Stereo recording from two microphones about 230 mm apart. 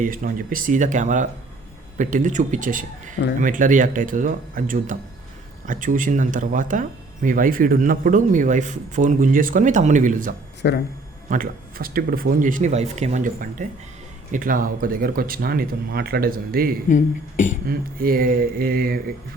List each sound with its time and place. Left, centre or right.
0.0 s speech: right
10.6 s a man's voice: left
11.3 s speech: right
16.9 s speech: left
17.7 s speech: right